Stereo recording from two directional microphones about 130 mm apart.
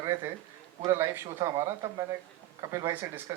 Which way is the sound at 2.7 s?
20° right (ahead or behind).